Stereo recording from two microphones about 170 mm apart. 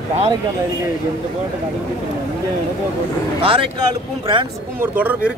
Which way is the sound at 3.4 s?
30° right (ahead or behind).